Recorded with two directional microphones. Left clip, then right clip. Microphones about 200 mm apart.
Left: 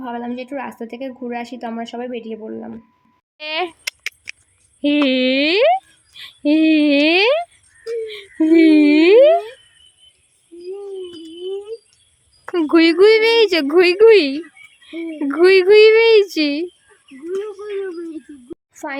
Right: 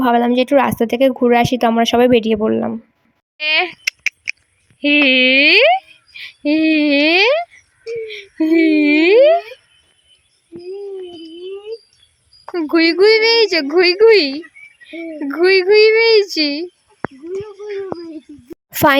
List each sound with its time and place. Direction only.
0.0 s speech: 50° right (ahead or behind)
3.3 s a sound: 10° left (ahead or behind)
4.8 s speech: 10° left (ahead or behind)
12.5 s a woman's voice: 15° left (ahead or behind)
18.7 s a woman's voice: 45° right (ahead or behind)